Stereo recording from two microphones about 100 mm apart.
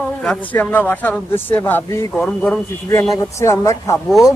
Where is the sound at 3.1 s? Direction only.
35° left (ahead or behind).